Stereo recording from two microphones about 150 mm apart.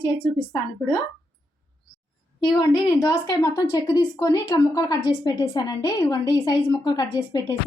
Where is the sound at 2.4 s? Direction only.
30° left (ahead or behind).